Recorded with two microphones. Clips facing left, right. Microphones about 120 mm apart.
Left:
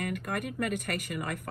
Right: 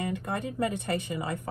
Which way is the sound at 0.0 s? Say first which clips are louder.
Right 2 dB; 20° right (ahead or behind).